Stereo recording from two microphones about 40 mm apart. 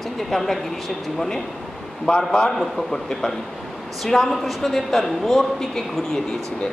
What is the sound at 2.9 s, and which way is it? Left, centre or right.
A man's voice, centre.